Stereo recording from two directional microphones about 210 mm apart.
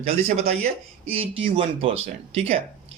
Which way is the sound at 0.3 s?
30° right (ahead or behind).